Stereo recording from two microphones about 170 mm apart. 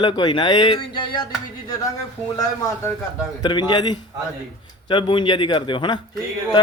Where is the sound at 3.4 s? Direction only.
25° left (ahead or behind).